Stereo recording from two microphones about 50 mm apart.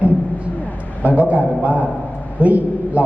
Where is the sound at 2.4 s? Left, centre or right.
Right.